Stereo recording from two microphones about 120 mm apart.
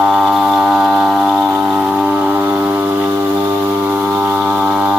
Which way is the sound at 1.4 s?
15° right (ahead or behind).